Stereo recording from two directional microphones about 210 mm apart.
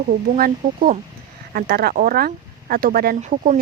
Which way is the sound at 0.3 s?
45° right (ahead or behind).